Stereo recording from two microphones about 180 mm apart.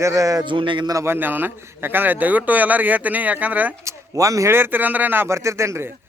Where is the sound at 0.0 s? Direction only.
20° right (ahead or behind).